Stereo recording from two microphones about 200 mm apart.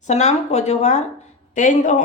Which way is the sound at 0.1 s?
35° left (ahead or behind).